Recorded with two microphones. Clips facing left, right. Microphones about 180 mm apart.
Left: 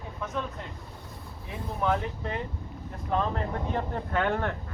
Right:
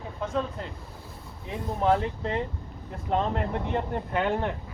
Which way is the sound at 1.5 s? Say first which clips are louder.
Right 4 dB; 30° right (ahead or behind).